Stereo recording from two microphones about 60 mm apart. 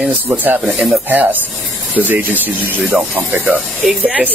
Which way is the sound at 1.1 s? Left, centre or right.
Right.